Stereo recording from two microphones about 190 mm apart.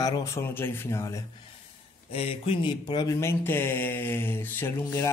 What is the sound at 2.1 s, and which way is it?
Speech, 30° left (ahead or behind).